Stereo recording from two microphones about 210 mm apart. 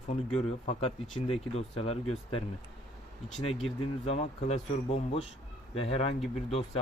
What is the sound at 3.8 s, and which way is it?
Speech, 30° left (ahead or behind).